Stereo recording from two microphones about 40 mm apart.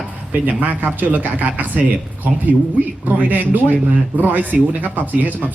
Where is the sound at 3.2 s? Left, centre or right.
Right.